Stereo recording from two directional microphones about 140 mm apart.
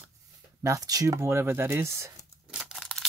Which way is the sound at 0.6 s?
25° right (ahead or behind).